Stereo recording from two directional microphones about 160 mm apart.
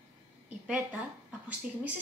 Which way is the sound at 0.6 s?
5° right (ahead or behind).